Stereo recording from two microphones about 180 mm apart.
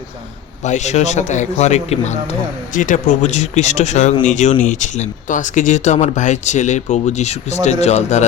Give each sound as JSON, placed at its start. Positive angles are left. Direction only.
{"t": 0.6, "sound": "speech", "side_deg": 40}